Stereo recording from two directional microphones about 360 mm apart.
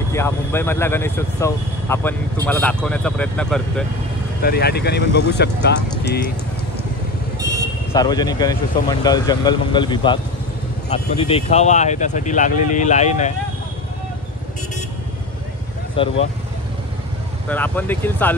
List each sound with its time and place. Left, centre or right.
0.1 s speech: centre
4.4 s speech: left
7.9 s speech: centre
16.0 s speech: centre
17.5 s speech: centre